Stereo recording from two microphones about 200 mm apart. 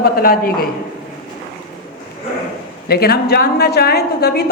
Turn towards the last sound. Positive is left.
turn(degrees=55)  # may be behind; listen again after turning